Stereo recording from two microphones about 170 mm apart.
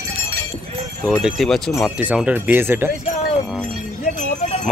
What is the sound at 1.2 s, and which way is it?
Speech, centre (ahead or behind).